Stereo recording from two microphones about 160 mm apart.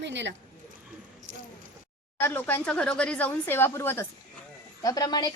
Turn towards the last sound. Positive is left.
turn(degrees=25)  # may be behind; listen again after turning